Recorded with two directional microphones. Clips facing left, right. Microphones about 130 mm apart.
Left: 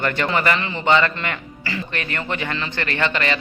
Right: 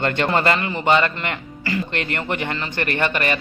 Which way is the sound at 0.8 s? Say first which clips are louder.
Left 1 dB; 15° right (ahead or behind).